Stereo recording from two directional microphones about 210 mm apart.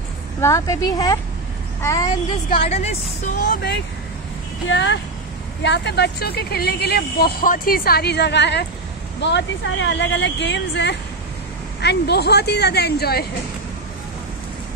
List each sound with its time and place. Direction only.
0.4 s a woman's voice: 15° left (ahead or behind)
2.7 s speech: 30° left (ahead or behind)
3.4 s speech: 55° left (ahead or behind)